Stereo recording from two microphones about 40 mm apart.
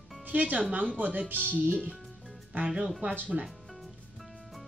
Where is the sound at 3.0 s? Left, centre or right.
Right.